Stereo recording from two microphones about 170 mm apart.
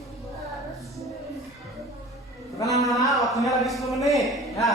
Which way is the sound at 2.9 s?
Centre (ahead or behind).